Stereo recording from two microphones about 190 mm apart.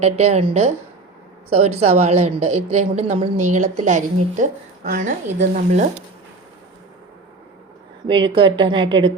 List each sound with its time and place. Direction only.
0.0 s a woman's voice: 35° right (ahead or behind)
8.0 s speech: 25° right (ahead or behind)